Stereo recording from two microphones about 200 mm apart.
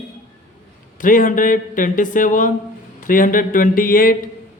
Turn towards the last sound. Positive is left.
turn(degrees=45)  # may be behind; listen again after turning